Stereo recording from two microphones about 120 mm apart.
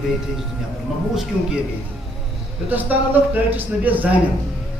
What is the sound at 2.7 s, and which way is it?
A man's voice, 15° right (ahead or behind).